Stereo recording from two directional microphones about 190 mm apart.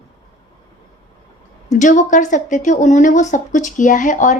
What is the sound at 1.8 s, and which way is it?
A woman's voice, 40° left (ahead or behind).